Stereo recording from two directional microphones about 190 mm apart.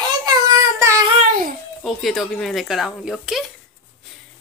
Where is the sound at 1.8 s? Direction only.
Centre (ahead or behind).